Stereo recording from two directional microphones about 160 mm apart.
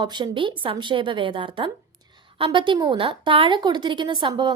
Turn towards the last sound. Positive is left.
turn(degrees=-30)  # may be behind; listen again after turning